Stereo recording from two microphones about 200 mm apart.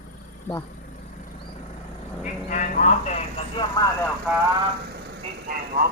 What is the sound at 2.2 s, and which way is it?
Speech, 40° left (ahead or behind).